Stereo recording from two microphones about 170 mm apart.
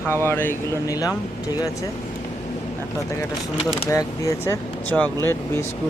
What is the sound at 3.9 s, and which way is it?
Speech, 20° left (ahead or behind).